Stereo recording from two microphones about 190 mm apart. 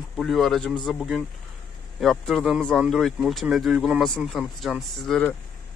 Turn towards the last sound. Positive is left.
turn(degrees=0)  # may be behind; listen again after turning